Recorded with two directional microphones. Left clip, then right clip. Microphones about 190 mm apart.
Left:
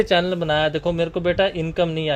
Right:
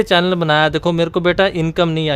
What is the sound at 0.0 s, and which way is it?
Speech, 25° right (ahead or behind).